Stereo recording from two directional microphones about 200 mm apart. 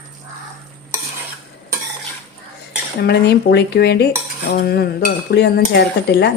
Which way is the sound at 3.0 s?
55° left (ahead or behind).